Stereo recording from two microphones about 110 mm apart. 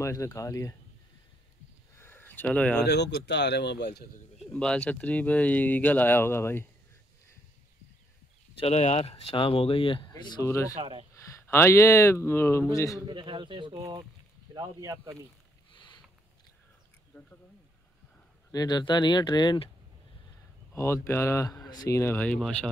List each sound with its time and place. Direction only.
0.0 s speech: 30° left (ahead or behind)
2.0 s a sound: 20° left (ahead or behind)
4.6 s speech: 10° left (ahead or behind)
8.5 s speech: 75° left (ahead or behind); by 10.3 s 40° left (ahead or behind)
10.4 s speech: 25° left (ahead or behind)
10.8 s speech: 55° right (ahead or behind)
11.2 s speech: 25° left (ahead or behind)
13.0 s speech: 45° right (ahead or behind)
13.7 s speech: 35° right (ahead or behind)
18.5 s speech: 40° left (ahead or behind)
20.7 s speech: 25° left (ahead or behind); by 22.7 s 10° left (ahead or behind)